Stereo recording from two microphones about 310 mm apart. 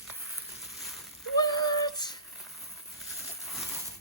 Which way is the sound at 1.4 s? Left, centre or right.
Centre.